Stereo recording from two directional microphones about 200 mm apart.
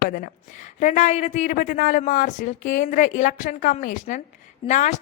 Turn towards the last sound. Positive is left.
turn(degrees=35)  # may be behind; listen again after turning